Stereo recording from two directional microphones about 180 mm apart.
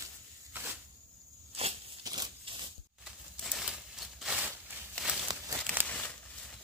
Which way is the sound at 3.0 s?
Centre (ahead or behind).